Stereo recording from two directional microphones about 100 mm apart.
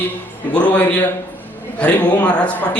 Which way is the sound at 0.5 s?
15° left (ahead or behind).